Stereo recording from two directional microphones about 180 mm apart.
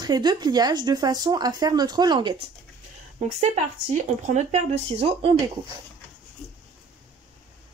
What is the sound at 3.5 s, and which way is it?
Speech, 40° right (ahead or behind).